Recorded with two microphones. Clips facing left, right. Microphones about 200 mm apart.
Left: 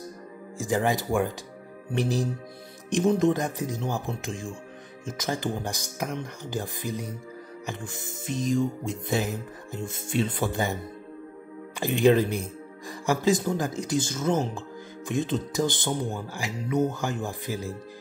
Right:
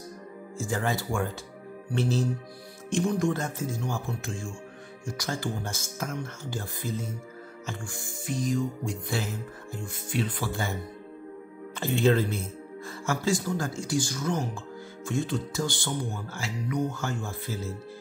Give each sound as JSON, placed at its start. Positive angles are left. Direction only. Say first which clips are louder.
{"t": 0.6, "sound": "speech", "louder": "left 4 dB", "side_deg": 15}
{"t": 7.6, "sound": "music", "louder": "left 2 dB", "side_deg": 20}
{"t": 11.8, "sound": "speech", "louder": "left 3 dB", "side_deg": 15}